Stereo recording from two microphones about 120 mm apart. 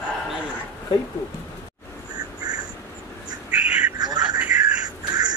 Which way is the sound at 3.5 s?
10° right (ahead or behind).